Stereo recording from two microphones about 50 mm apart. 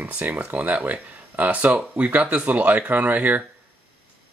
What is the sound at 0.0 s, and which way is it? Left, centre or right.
Speech, right.